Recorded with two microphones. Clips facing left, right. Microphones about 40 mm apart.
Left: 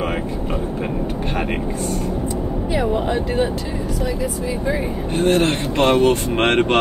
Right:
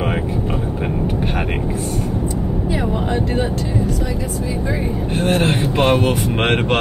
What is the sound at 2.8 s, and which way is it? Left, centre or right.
Speech, centre.